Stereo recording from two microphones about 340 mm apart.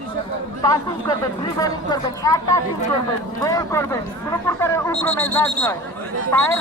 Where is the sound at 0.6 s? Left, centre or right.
Centre.